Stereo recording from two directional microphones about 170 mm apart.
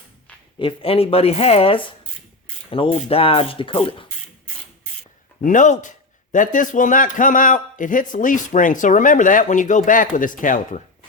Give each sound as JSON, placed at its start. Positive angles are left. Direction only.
{"t": 0.6, "sound": "speech", "side_deg": 35}
{"t": 5.4, "sound": "a man's voice", "side_deg": 50}